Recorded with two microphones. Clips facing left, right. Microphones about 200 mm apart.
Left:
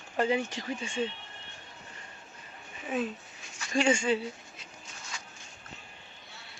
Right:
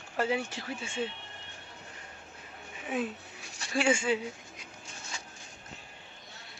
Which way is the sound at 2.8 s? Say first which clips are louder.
Left 1 dB; 10° right (ahead or behind).